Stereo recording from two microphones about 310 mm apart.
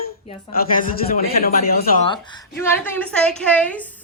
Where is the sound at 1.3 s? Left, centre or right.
Left.